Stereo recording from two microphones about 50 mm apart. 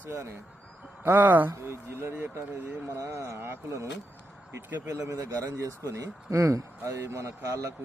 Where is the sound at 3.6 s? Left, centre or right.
Right.